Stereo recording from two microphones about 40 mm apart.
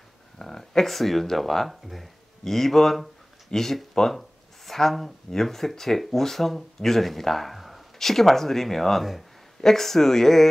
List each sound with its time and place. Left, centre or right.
0.4 s speech: centre